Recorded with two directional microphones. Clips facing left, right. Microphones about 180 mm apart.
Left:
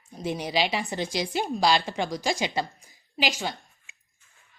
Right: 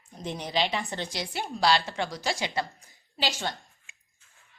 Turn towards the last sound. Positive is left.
turn(degrees=15)  # may be behind; listen again after turning